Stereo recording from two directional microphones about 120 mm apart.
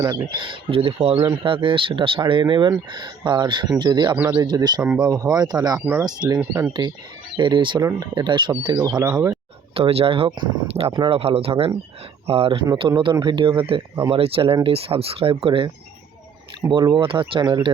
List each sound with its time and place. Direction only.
0.0 s speech: 40° right (ahead or behind)
5.8 s speech: 15° right (ahead or behind)
6.1 s speech: 35° right (ahead or behind)
7.8 s speech: 30° right (ahead or behind)
9.7 s speech: 55° right (ahead or behind)